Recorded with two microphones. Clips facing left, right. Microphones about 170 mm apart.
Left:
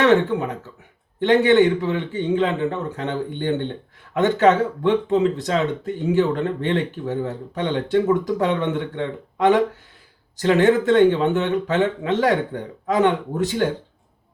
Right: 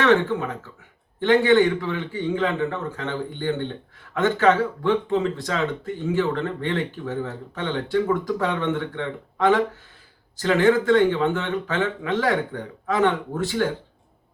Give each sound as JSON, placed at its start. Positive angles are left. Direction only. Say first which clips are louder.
{"t": 0.0, "sound": "speech", "louder": "left 2 dB", "side_deg": 20}